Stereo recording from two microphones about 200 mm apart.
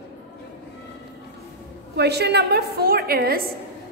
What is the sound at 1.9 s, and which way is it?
A woman's voice, 55° right (ahead or behind).